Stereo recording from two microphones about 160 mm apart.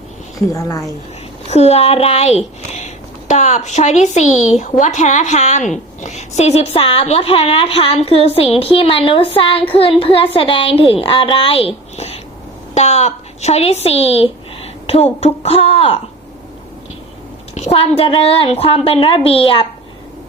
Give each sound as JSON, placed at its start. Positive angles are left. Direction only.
{"t": 0.3, "sound": "a woman's voice", "side_deg": 20}
{"t": 1.5, "sound": "a woman's voice", "side_deg": 40}
{"t": 17.5, "sound": "a woman's voice", "side_deg": 40}